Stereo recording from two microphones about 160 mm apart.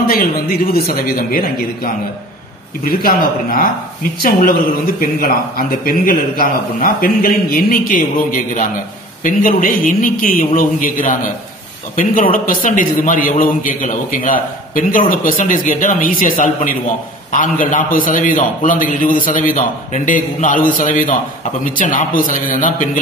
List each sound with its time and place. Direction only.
0.1 s speech: 70° left (ahead or behind)
2.8 s a man's voice: 65° left (ahead or behind)
5.0 s a man's voice: 65° left (ahead or behind)